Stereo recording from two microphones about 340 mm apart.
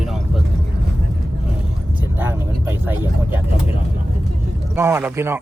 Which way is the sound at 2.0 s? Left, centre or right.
Centre.